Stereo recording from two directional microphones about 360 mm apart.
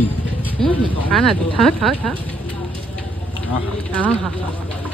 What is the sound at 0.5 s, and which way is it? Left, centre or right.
Vehicle, centre.